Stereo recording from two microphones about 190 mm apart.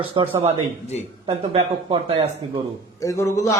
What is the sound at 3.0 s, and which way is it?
Speech, 15° left (ahead or behind).